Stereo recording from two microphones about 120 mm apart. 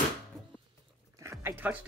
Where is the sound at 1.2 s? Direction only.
25° right (ahead or behind).